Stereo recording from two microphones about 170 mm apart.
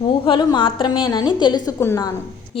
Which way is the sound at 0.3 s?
30° left (ahead or behind).